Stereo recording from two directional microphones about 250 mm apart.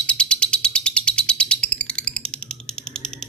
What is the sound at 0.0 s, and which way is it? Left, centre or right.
Bird, centre.